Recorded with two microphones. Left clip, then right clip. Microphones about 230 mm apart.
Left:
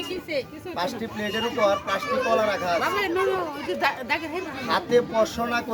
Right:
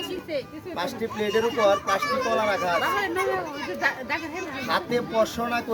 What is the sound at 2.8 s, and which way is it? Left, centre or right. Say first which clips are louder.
Speech: left 1 dB; left.